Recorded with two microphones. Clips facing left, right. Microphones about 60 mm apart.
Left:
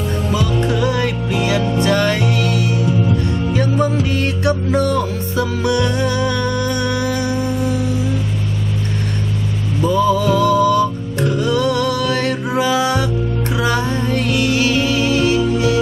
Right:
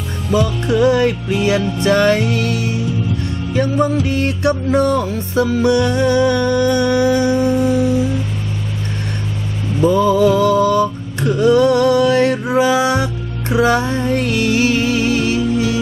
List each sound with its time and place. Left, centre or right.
0.7 s music: right
3.5 s music: right
9.8 s music: right
15.4 s music: left